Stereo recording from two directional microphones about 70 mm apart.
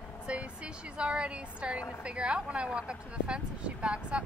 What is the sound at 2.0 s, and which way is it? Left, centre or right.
Speech, centre.